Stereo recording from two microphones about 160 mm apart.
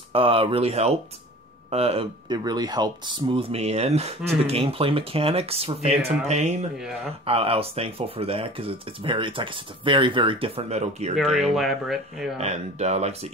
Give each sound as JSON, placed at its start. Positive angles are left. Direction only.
{"t": 0.1, "sound": "speech", "side_deg": -35}
{"t": 11.3, "sound": "speech", "side_deg": 0}
{"t": 12.4, "sound": "speech", "side_deg": -45}